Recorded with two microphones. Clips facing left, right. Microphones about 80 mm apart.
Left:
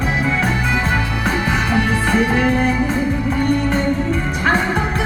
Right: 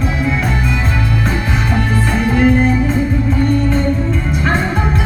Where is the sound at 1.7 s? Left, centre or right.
Left.